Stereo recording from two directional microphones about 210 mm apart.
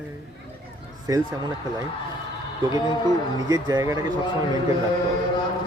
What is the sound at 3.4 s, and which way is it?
Speech, 20° right (ahead or behind).